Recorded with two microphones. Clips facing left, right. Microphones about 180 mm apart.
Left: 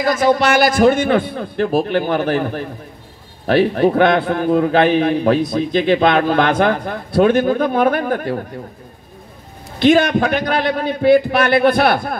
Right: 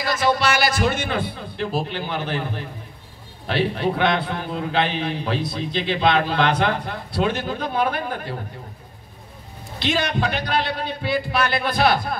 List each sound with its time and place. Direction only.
0.0 s a man's voice: 50° left (ahead or behind)
9.8 s a man's voice: 50° left (ahead or behind)